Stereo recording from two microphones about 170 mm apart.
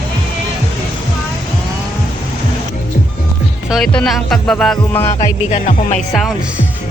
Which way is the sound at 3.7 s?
5° left (ahead or behind).